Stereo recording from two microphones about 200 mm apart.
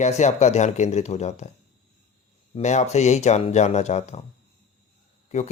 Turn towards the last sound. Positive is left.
turn(degrees=35)  # may be behind; listen again after turning